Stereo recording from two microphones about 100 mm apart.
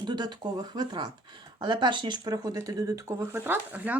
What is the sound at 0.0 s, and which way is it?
Speech, 45° right (ahead or behind).